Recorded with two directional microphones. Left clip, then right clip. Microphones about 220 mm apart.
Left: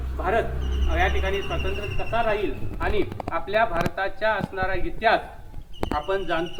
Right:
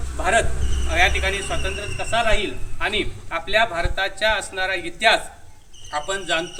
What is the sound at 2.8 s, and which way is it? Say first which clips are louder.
A man's voice: right 3 dB; 25° right (ahead or behind).